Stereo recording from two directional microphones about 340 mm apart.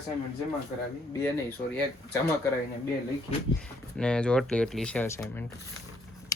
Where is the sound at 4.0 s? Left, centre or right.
Centre.